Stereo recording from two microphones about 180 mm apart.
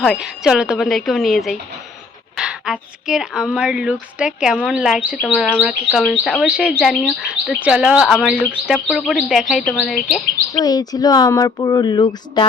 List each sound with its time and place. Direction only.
0.0 s speech: centre (ahead or behind)
10.5 s speech: 20° left (ahead or behind)